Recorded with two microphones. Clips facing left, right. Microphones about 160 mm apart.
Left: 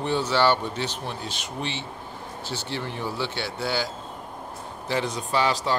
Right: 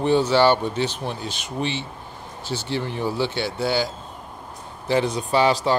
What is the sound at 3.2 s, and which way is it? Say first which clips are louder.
Speech: right 6 dB; 20° right (ahead or behind).